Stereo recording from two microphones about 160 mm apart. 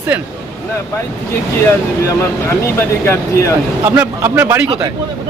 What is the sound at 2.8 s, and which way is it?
Speech, 15° left (ahead or behind).